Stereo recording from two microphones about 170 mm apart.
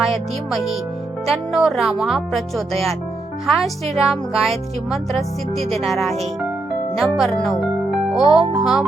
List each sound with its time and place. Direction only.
0.1 s speech: centre (ahead or behind)
5.5 s speech: 35° right (ahead or behind)
5.8 s speech: centre (ahead or behind)
6.9 s music: centre (ahead or behind)
8.3 s speech: centre (ahead or behind)